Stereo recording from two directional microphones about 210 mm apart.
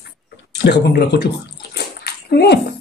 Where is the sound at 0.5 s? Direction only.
50° left (ahead or behind).